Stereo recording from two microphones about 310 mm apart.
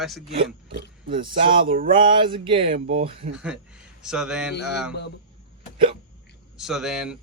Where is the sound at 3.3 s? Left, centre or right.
Centre.